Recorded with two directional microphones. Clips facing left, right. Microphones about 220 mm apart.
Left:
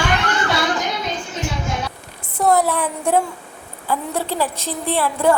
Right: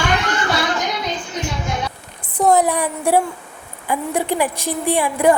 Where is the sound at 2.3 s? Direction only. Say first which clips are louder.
Right 2 dB; 15° right (ahead or behind).